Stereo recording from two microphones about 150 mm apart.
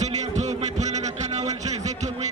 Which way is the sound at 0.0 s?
50° right (ahead or behind).